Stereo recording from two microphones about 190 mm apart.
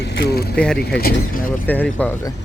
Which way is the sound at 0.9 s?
50° left (ahead or behind).